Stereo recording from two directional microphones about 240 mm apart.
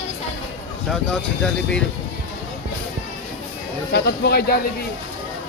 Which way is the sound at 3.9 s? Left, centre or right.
Left.